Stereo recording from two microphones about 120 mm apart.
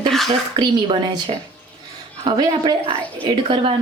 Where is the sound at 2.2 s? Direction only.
35° right (ahead or behind).